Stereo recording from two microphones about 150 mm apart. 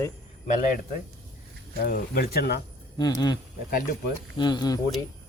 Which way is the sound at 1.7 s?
90° left.